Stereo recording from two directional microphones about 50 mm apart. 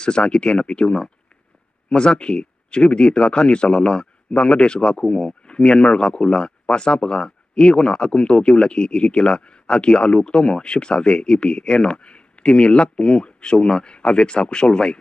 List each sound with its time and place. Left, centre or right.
0.0 s speech: centre